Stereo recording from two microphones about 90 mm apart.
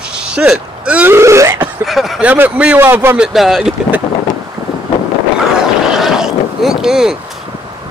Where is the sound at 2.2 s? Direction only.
15° right (ahead or behind).